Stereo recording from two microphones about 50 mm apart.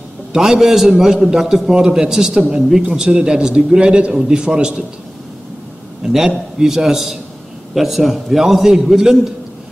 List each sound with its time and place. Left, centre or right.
0.3 s a man's voice: centre
6.0 s a man's voice: centre